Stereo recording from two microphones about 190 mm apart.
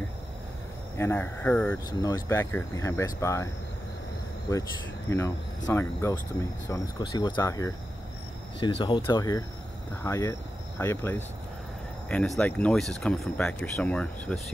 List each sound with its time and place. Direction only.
0.9 s speech: 15° left (ahead or behind)
4.5 s speech: 20° left (ahead or behind)
5.7 s speech: 15° left (ahead or behind)